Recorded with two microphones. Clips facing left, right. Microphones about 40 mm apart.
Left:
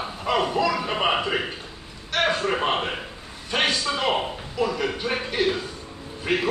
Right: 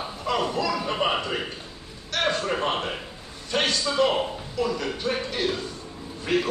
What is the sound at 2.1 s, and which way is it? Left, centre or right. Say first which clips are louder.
A man's voice: left 2 dB; centre.